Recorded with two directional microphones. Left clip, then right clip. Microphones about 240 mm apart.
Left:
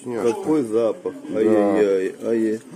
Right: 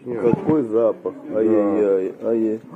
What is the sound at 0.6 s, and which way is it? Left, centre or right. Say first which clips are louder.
A man's voice: right 2 dB; left.